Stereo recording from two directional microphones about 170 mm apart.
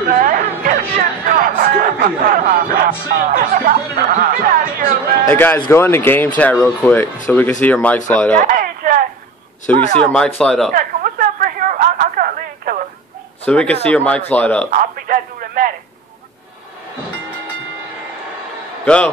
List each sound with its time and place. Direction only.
0.2 s music: 55° right (ahead or behind)
5.3 s speech: 10° left (ahead or behind)
8.4 s a sound: 55° right (ahead or behind)
9.9 s speech: 5° left (ahead or behind)
10.7 s a sound: 55° right (ahead or behind)
13.5 s speech: 5° left (ahead or behind)
14.7 s speech: 55° right (ahead or behind)